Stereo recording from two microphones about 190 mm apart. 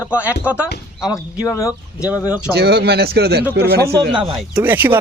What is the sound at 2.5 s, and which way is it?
Speech, 60° right (ahead or behind).